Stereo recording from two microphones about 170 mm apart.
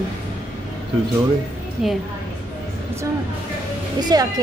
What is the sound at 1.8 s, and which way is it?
Speech, centre (ahead or behind).